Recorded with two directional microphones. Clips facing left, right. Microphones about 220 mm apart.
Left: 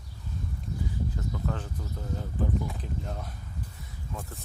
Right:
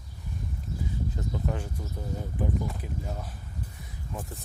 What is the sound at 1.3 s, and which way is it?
Speech, 15° right (ahead or behind).